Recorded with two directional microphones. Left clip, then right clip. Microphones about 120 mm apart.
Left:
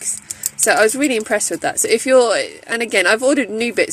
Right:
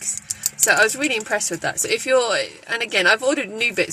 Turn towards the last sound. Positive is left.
turn(degrees=45)  # may be behind; listen again after turning